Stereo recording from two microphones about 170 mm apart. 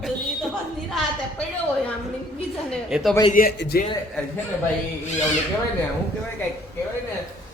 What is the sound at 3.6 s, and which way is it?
Speech, 70° left (ahead or behind).